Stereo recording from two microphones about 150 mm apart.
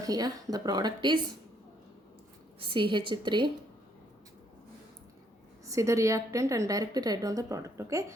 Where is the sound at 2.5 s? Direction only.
35° right (ahead or behind).